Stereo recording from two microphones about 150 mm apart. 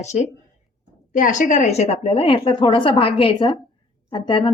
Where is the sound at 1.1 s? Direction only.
60° left (ahead or behind).